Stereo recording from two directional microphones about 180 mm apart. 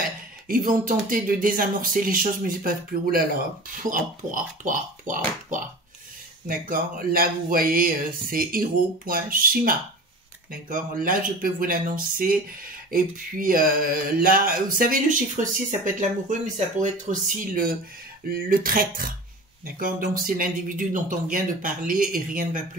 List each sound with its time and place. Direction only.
0.5 s speech: 50° right (ahead or behind)
18.3 s speech: 55° right (ahead or behind)